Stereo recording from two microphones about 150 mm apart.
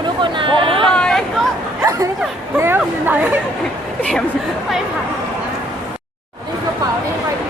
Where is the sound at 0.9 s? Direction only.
5° left (ahead or behind).